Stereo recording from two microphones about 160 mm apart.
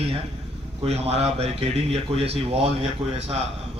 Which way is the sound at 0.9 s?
40° right (ahead or behind).